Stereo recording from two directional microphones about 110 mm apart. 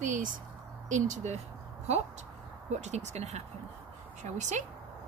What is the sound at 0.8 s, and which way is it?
Speech, 90° right.